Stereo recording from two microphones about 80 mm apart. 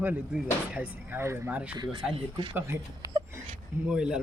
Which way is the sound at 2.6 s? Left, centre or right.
Right.